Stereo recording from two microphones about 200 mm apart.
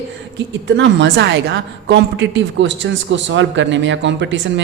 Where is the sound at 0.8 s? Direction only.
65° right (ahead or behind).